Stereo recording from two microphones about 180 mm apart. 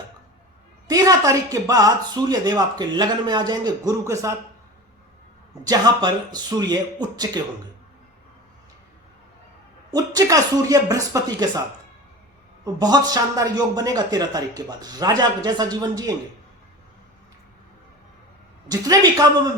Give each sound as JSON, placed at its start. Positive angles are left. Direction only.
{"t": 0.9, "sound": "a man's voice", "side_deg": -20}
{"t": 5.6, "sound": "a man's voice", "side_deg": -20}
{"t": 9.9, "sound": "a man's voice", "side_deg": -20}
{"t": 12.6, "sound": "a man's voice", "side_deg": -20}
{"t": 18.7, "sound": "a man's voice", "side_deg": -20}